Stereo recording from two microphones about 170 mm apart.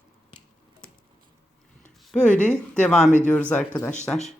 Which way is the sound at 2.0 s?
5° left (ahead or behind).